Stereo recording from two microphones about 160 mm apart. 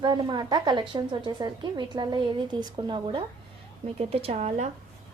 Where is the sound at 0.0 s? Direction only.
25° right (ahead or behind).